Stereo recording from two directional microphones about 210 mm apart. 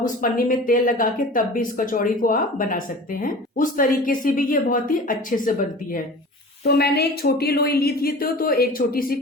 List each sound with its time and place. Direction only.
0.0 s speech: 40° left (ahead or behind)
6.7 s a woman's voice: 50° left (ahead or behind)